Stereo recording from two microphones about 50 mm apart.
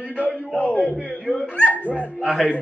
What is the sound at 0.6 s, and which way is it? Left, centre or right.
A man's voice, left.